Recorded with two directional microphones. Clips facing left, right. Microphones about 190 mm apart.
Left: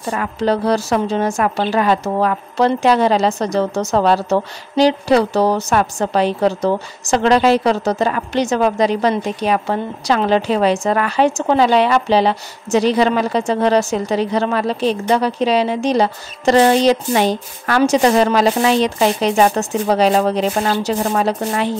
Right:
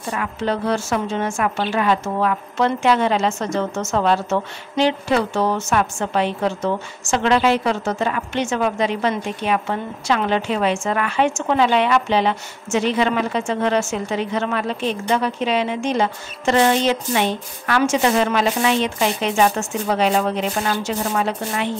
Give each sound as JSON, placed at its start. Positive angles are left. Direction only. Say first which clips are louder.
{"t": 0.1, "sound": "a woman's voice", "louder": "left 5 dB", "side_deg": 35}